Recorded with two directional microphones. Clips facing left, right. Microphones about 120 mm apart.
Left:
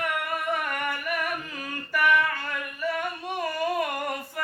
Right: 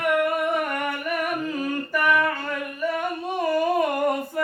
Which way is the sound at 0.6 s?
25° right (ahead or behind).